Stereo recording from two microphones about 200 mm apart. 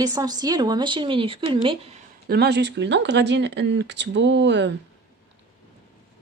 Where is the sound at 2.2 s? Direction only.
55° right (ahead or behind).